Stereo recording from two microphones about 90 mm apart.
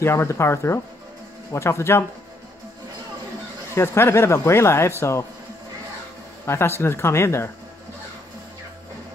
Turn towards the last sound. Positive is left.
turn(degrees=30)  # may be behind; listen again after turning